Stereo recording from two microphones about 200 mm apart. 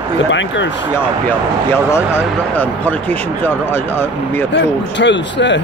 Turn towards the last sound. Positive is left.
turn(degrees=60)  # may be behind; listen again after turning